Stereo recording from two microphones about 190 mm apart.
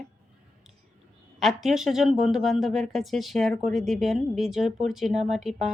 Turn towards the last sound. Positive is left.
turn(degrees=0)  # may be behind; listen again after turning